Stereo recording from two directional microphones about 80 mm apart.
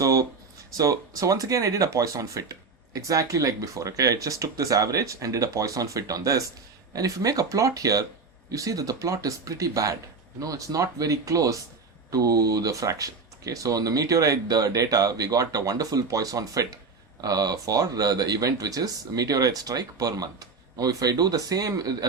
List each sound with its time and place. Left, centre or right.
0.8 s speech: right